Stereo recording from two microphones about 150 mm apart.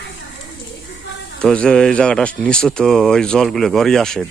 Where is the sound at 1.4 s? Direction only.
5° left (ahead or behind).